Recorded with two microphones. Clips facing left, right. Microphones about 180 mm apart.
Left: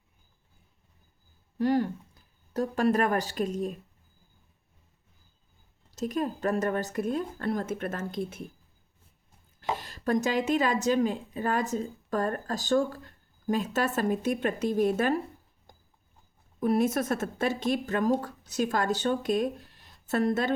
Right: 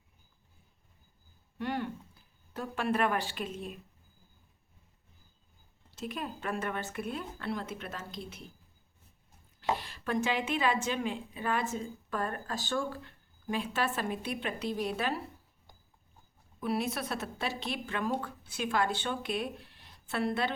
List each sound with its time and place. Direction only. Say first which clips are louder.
1.5 s a woman's voice: left 9 dB; 35° left (ahead or behind)
5.9 s speech: left 8 dB; 40° left (ahead or behind)
9.7 s a woman's voice: left 9 dB; 40° left (ahead or behind)
16.6 s speech: left 8 dB; 45° left (ahead or behind)